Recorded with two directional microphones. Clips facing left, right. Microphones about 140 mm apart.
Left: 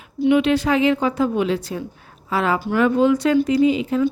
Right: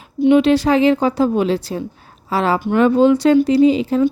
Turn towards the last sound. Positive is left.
turn(degrees=-35)  # may be behind; listen again after turning